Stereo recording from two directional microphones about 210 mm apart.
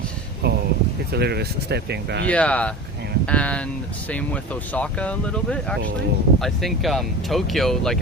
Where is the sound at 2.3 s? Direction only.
5° left (ahead or behind).